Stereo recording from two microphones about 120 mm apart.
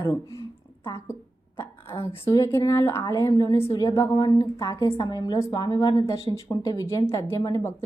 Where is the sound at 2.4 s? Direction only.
25° left (ahead or behind).